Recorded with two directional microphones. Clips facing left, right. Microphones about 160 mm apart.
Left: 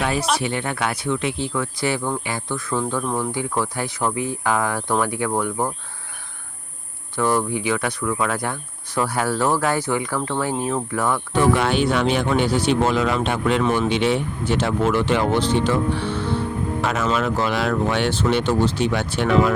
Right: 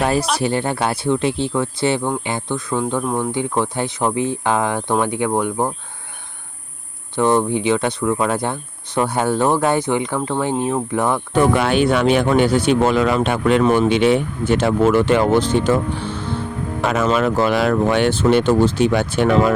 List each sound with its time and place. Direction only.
0.0 s a sound: 40° right (ahead or behind)
0.3 s speech: 35° right (ahead or behind); by 5.7 s 20° right (ahead or behind)
7.2 s speech: 25° right (ahead or behind)
11.3 s speech: 55° right (ahead or behind)
16.8 s speech: 50° right (ahead or behind)